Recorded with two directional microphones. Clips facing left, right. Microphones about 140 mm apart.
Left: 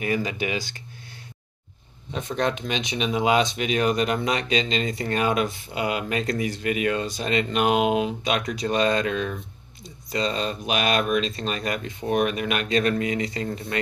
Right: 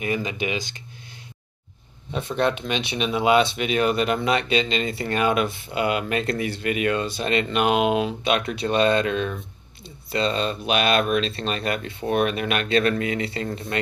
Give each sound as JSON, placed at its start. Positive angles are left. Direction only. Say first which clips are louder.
{"t": 0.0, "sound": "speech", "louder": "even", "side_deg": -25}
{"t": 2.1, "sound": "speech", "louder": "right 2 dB", "side_deg": 40}
{"t": 8.4, "sound": "speech", "louder": "even", "side_deg": -30}
{"t": 12.9, "sound": "speech", "louder": "even", "side_deg": 35}
{"t": 13.2, "sound": "speech", "louder": "even", "side_deg": -35}